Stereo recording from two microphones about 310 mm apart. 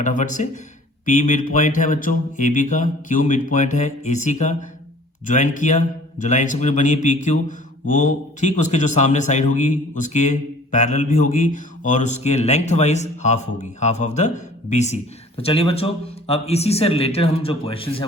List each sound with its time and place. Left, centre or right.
0.0 s a man's voice: left